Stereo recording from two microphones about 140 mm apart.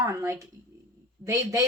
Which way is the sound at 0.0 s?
20° right (ahead or behind).